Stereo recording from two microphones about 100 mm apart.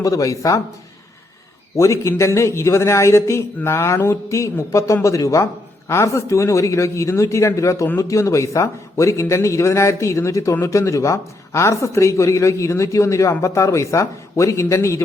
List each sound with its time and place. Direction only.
0.0 s speech: 35° left (ahead or behind)
1.7 s a man's voice: 30° left (ahead or behind)